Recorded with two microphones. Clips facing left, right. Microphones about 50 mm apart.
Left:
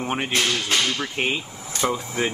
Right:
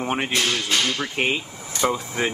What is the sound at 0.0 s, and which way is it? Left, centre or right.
Speech, centre.